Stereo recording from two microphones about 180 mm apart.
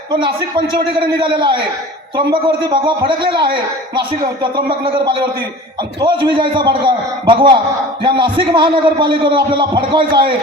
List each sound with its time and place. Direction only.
0.1 s a man's voice: 25° right (ahead or behind)